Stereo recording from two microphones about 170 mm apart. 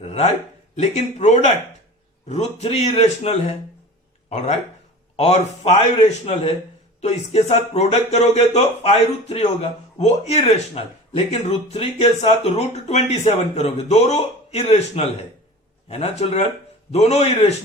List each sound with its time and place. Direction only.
0.0 s a man's voice: 35° left (ahead or behind)